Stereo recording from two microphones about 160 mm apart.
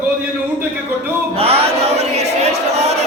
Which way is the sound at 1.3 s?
40° right (ahead or behind).